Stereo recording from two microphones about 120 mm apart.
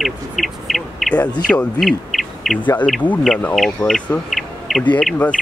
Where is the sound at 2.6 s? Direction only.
15° left (ahead or behind).